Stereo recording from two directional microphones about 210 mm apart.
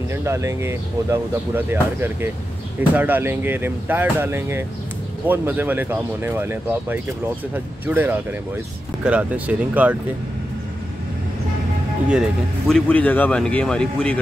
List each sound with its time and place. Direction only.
0.1 s speech: 10° right (ahead or behind)
12.1 s speech: centre (ahead or behind)